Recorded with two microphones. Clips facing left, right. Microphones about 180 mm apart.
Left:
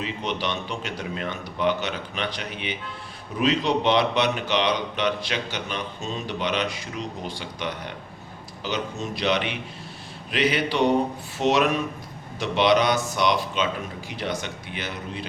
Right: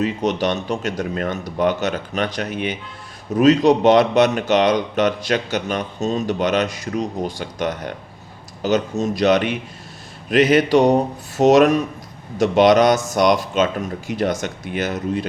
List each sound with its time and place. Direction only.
0.0 s speech: 45° right (ahead or behind)